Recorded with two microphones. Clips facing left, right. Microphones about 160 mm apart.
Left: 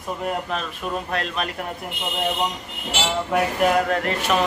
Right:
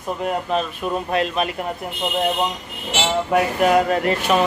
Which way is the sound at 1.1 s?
5° right (ahead or behind).